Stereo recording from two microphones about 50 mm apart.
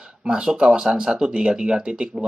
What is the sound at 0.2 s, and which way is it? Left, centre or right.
Speech, centre.